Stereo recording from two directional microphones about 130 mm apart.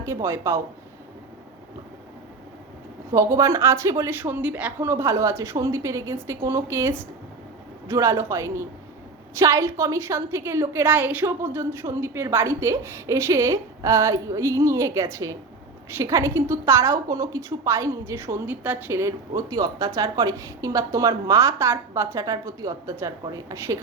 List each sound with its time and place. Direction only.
0.0 s a woman's voice: 20° right (ahead or behind)
3.1 s a woman's voice: 25° right (ahead or behind)